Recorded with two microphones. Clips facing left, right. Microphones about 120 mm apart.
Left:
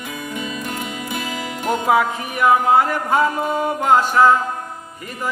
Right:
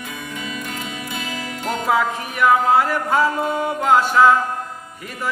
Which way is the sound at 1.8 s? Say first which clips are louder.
Left 1 dB; 5° left (ahead or behind).